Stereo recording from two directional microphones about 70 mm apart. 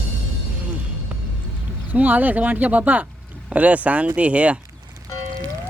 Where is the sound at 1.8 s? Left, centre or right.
Right.